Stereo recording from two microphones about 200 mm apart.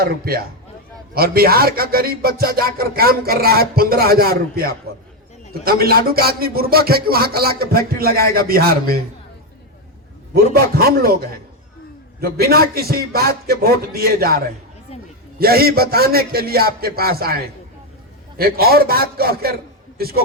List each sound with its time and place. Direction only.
0.0 s music: 50° right (ahead or behind)
10.5 s music: 50° right (ahead or behind)
12.2 s music: 50° right (ahead or behind)
18.3 s music: 50° right (ahead or behind)